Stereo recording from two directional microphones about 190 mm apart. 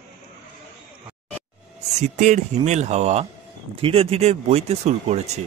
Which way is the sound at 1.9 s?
40° right (ahead or behind).